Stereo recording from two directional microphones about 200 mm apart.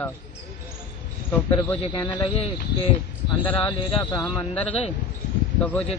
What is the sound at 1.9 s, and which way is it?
Speech, 25° left (ahead or behind).